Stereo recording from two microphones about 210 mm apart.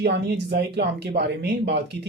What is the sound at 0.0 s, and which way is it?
Speech, 55° right (ahead or behind).